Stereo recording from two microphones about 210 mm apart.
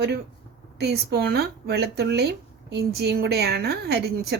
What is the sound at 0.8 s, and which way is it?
Speech, 50° right (ahead or behind).